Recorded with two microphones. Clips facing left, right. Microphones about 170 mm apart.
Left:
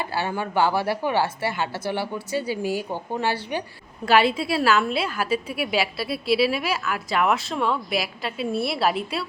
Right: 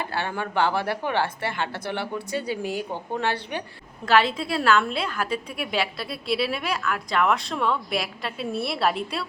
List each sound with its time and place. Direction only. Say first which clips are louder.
0.1 s a woman's voice: left 2 dB; 5° left (ahead or behind)